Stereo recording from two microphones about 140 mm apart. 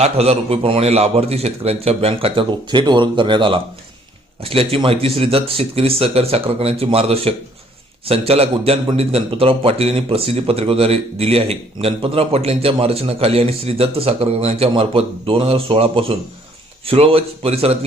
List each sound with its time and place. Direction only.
0.0 s a man's voice: 45° right (ahead or behind)